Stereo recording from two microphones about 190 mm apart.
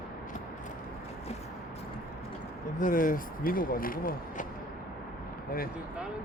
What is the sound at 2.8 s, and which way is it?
Speech, 45° left (ahead or behind).